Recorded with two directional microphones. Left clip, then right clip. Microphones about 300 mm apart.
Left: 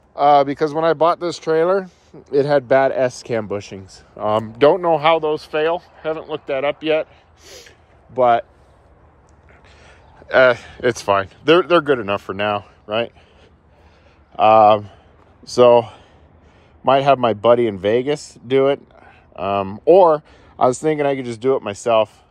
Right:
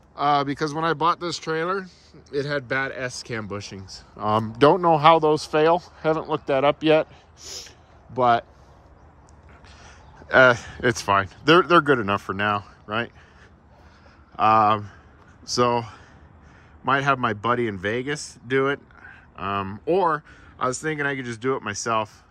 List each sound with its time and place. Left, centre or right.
0.1 s a man's voice: centre
10.3 s a man's voice: centre
14.3 s a man's voice: centre